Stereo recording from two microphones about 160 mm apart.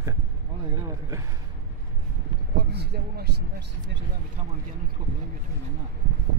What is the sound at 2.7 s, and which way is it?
Speech, 90° right.